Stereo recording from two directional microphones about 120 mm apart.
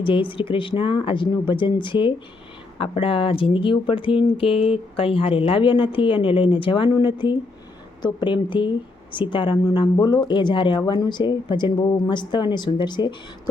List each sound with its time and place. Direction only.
0.0 s speech: 45° left (ahead or behind)